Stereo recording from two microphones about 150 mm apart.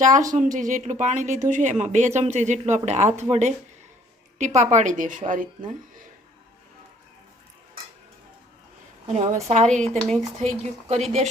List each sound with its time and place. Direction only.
0.3 s a woman's voice: 60° right (ahead or behind)
9.0 s speech: 50° right (ahead or behind)